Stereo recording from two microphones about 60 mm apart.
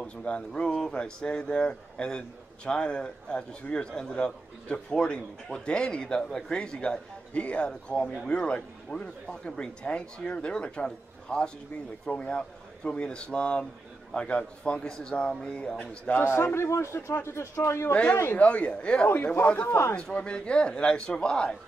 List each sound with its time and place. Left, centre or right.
0.0 s speech: centre
16.3 s a man's voice: left
18.3 s speech: left
19.0 s a man's voice: left
20.0 s speech: centre